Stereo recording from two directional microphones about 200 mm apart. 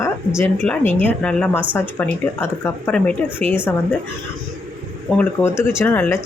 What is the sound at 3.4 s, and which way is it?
Speech, 35° right (ahead or behind).